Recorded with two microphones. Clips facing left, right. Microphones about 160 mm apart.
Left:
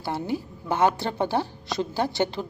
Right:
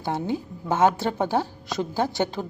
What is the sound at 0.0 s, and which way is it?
A woman's voice, 20° right (ahead or behind).